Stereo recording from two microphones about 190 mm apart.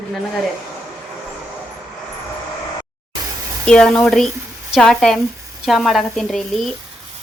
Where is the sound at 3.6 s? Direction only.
5° left (ahead or behind).